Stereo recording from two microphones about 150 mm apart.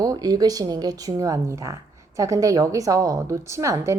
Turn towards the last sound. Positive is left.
turn(degrees=-20)  # may be behind; listen again after turning